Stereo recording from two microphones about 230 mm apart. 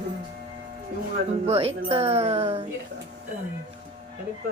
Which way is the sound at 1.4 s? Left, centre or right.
Right.